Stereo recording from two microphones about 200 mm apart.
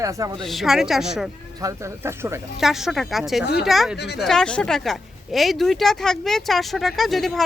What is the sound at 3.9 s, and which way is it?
Speech, 55° left (ahead or behind).